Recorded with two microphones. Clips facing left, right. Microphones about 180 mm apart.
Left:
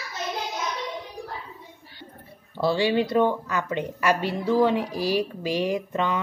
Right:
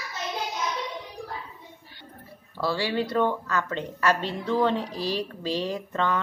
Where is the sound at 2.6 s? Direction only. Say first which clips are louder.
Left 5 dB; 20° left (ahead or behind).